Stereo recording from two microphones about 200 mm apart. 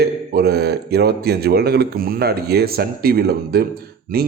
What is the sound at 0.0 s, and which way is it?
Speech, 50° right (ahead or behind).